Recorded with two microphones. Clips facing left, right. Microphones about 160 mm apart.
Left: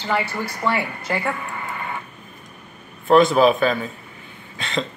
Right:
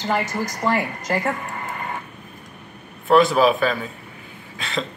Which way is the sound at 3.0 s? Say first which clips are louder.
Left 1 dB; centre (ahead or behind).